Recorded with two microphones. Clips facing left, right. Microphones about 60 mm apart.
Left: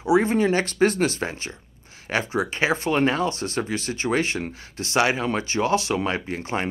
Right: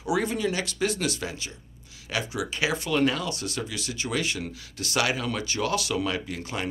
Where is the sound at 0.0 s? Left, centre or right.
Left.